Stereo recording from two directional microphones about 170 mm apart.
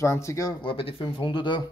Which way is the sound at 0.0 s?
15° left (ahead or behind).